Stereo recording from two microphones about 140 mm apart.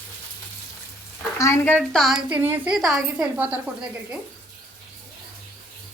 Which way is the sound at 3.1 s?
10° right (ahead or behind).